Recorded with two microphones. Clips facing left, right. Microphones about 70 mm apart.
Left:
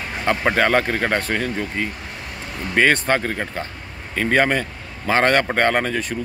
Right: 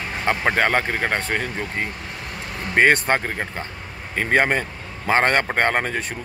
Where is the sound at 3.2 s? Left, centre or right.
Centre.